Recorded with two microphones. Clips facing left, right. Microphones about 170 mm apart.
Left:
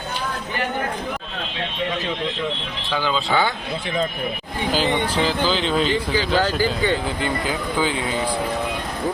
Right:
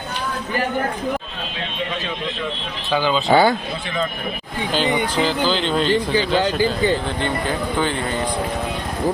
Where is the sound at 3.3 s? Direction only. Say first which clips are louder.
Right 8 dB; 40° right (ahead or behind).